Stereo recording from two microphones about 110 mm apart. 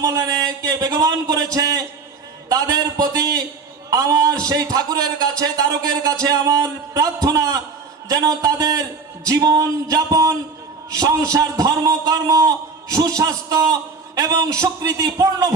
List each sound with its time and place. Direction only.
0.0 s a man's voice: 30° right (ahead or behind)